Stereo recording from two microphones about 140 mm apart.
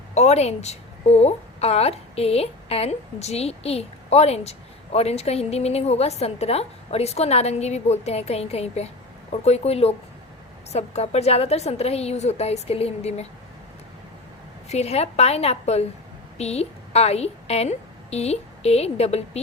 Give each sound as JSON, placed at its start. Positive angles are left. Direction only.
{"t": 0.1, "sound": "a woman's voice", "side_deg": 50}
{"t": 14.7, "sound": "a woman's voice", "side_deg": 50}